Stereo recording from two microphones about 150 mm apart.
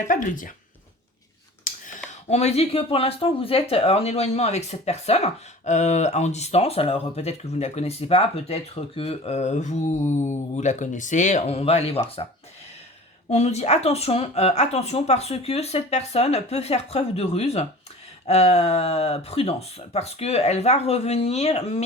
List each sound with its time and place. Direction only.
0.0 s speech: 60° left (ahead or behind)
2.0 s speech: 45° left (ahead or behind)
13.3 s speech: 45° left (ahead or behind)